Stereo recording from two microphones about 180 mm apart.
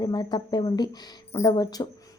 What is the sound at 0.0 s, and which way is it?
Speech, 25° left (ahead or behind).